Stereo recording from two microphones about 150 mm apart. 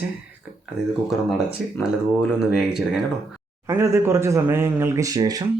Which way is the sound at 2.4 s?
5° right (ahead or behind).